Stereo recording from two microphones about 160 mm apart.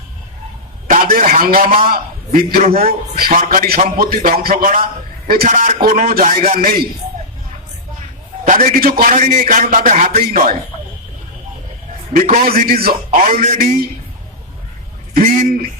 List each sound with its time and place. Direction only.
1.1 s a man's voice: 60° right (ahead or behind)
8.4 s a man's voice: 60° right (ahead or behind)
12.1 s a man's voice: 55° right (ahead or behind); by 12.9 s 70° right (ahead or behind)
13.1 s a man's voice: 55° right (ahead or behind)
15.1 s a man's voice: 60° right (ahead or behind)